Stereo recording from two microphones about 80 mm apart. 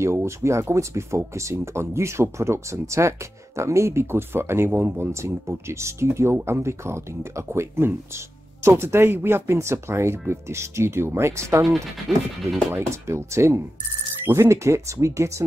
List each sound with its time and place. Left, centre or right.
0.0 s speech: right
12.7 s speech: right